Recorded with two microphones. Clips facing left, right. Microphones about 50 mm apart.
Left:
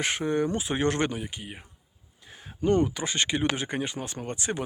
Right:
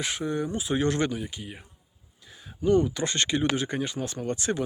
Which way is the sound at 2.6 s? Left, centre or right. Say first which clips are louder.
Right 1 dB; left.